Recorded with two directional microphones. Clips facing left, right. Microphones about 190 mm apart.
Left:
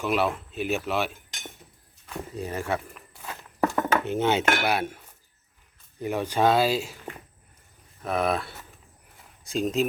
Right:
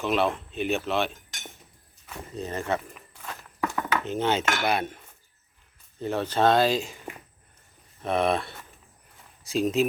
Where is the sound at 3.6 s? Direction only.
45° left (ahead or behind).